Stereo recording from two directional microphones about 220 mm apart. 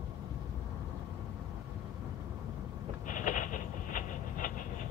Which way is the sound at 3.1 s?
35° left (ahead or behind).